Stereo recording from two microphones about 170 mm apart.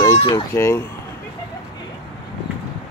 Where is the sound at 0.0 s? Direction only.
20° left (ahead or behind).